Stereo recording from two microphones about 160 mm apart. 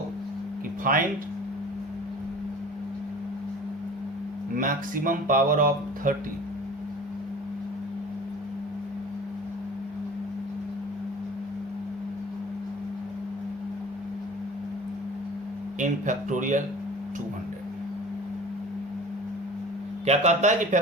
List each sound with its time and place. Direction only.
0.9 s speech: 60° right (ahead or behind)
4.5 s speech: 60° right (ahead or behind)
15.8 s speech: 50° right (ahead or behind)
20.1 s a man's voice: 45° right (ahead or behind)